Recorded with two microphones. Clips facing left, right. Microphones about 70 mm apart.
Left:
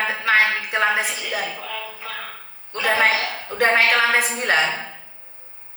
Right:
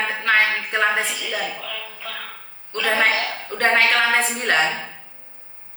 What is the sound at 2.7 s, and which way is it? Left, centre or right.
A woman's voice, centre.